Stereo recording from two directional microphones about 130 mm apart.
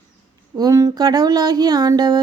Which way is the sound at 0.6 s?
30° right (ahead or behind).